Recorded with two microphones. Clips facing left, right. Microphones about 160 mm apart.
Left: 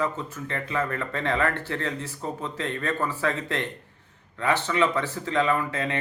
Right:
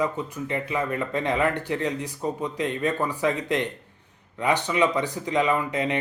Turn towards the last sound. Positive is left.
turn(degrees=-15)  # may be behind; listen again after turning